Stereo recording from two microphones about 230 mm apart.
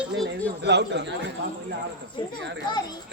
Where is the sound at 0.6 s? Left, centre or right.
Right.